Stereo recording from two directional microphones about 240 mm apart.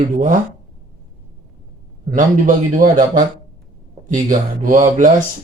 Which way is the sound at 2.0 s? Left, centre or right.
Right.